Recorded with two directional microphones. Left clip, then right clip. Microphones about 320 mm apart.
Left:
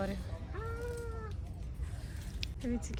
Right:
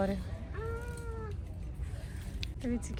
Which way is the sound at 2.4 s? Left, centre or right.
Centre.